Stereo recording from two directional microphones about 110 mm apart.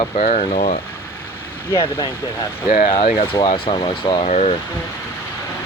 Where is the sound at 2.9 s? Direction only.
55° left (ahead or behind).